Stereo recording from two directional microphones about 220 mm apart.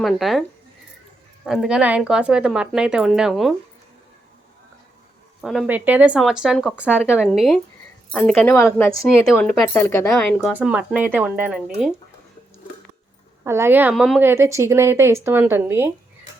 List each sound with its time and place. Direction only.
0.0 s speech: centre (ahead or behind)
1.5 s speech: centre (ahead or behind)
5.4 s a woman's voice: centre (ahead or behind)
13.4 s a woman's voice: 10° right (ahead or behind)